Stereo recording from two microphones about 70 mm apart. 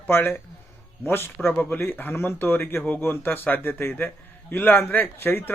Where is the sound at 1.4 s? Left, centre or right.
Left.